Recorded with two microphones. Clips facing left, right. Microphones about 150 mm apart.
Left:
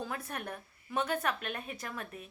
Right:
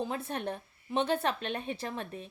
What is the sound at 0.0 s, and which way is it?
A woman's voice, 25° right (ahead or behind).